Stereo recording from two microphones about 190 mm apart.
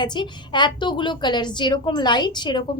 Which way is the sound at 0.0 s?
25° left (ahead or behind).